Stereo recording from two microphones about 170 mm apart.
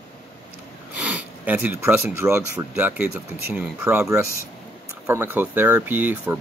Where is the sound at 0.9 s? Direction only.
10° right (ahead or behind).